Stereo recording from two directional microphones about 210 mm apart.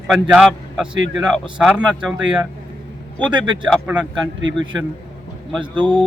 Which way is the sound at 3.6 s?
Centre (ahead or behind).